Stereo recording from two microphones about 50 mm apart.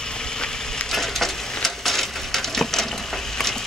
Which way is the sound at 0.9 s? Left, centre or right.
Centre.